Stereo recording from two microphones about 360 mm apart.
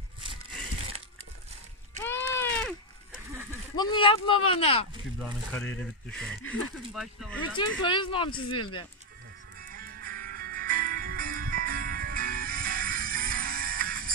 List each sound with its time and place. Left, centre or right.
2.0 s a sound: centre
3.7 s speech: centre
5.2 s speech: centre
7.5 s speech: centre
9.7 s music: right